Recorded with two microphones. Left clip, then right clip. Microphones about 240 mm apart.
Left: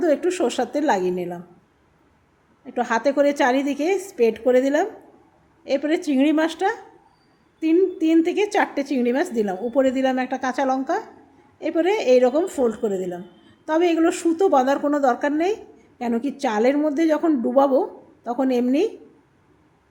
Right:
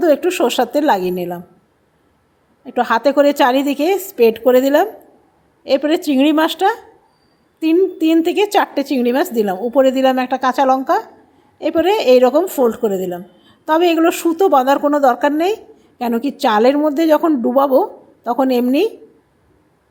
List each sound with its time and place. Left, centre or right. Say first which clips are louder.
0.0 s a woman's voice: right 6 dB; centre
2.6 s a woman's voice: right 7 dB; centre